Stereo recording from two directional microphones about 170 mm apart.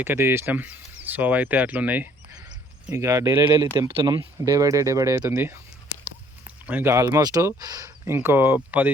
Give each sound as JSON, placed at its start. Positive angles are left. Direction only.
{"t": 0.0, "sound": "speech", "side_deg": -15}
{"t": 6.7, "sound": "speech", "side_deg": -10}